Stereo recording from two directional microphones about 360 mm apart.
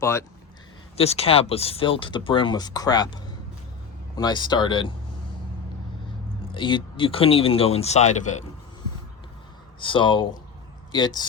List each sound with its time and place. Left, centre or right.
0.0 s speech: centre
6.5 s speech: centre
9.8 s speech: centre